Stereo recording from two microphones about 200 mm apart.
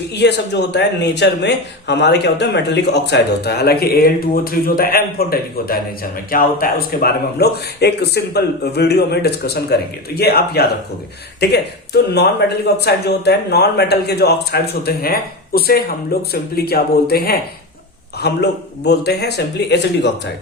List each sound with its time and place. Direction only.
0.1 s speech: 60° left (ahead or behind)
12.4 s speech: 55° left (ahead or behind)